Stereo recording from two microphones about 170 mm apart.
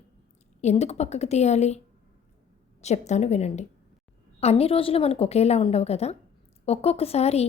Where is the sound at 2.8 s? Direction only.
40° left (ahead or behind).